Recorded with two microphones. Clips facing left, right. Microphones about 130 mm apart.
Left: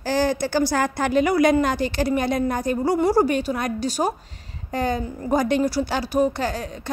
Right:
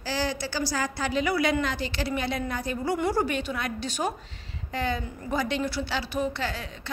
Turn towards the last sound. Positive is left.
turn(degrees=45)  # may be behind; listen again after turning